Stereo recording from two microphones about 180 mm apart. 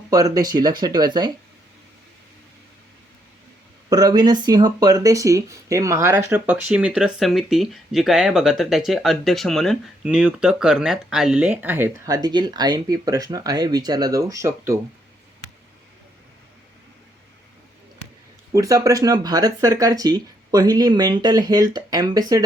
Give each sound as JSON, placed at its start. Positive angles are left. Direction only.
{"t": 0.1, "sound": "speech", "side_deg": -20}
{"t": 3.8, "sound": "speech", "side_deg": -20}
{"t": 18.5, "sound": "speech", "side_deg": -20}